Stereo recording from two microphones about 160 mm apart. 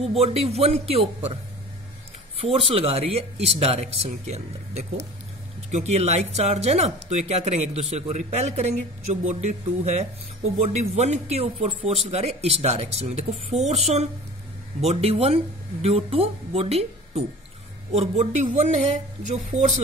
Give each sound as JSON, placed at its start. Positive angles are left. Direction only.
{"t": 0.0, "sound": "speech", "side_deg": -40}
{"t": 2.4, "sound": "speech", "side_deg": -35}